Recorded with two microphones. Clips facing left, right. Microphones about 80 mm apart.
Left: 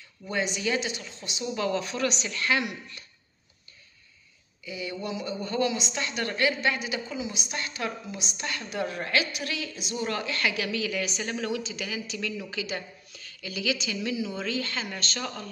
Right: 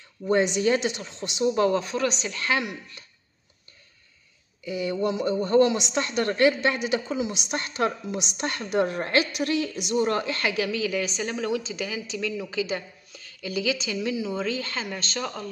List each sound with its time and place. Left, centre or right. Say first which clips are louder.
0.3 s speech: right 7 dB; right
1.4 s speech: right 7 dB; right
4.6 s a woman's voice: right 8 dB; right
8.4 s a woman's voice: right 7 dB; right
9.8 s speech: right 9 dB; right
10.0 s speech: right 4 dB; right
15.1 s speech: right 6 dB; centre